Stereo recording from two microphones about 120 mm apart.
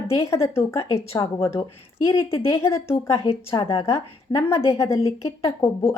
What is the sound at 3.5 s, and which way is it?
A woman's voice, 30° left (ahead or behind).